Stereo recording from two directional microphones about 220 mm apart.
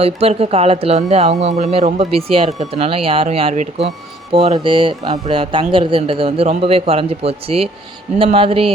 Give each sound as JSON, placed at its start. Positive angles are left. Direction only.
{"t": 0.0, "sound": "a man's voice", "side_deg": -25}